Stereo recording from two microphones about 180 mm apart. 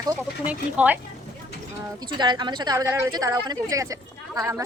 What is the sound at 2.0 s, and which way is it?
A woman's voice, 25° right (ahead or behind).